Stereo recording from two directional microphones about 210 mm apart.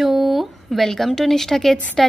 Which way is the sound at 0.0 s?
Centre (ahead or behind).